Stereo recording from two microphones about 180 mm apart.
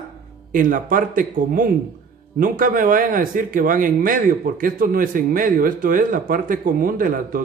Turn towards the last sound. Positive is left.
turn(degrees=-50)  # may be behind; listen again after turning